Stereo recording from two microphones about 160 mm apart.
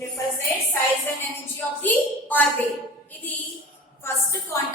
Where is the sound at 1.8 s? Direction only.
10° left (ahead or behind).